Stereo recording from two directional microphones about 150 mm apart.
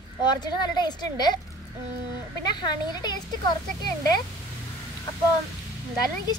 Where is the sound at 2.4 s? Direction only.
30° left (ahead or behind).